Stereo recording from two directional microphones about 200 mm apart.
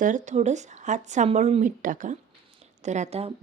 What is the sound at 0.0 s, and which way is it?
A woman's voice, 40° right (ahead or behind).